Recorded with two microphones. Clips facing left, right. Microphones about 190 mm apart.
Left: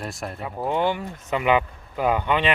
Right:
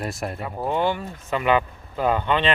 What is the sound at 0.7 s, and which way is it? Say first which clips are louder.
Speech: even; 15° left (ahead or behind).